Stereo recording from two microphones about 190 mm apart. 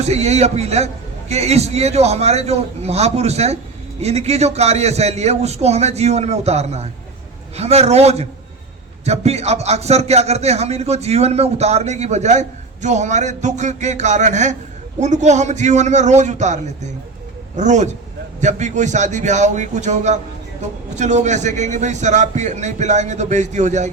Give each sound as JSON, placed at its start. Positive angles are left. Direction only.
{"t": 0.0, "sound": "a man's voice", "side_deg": -35}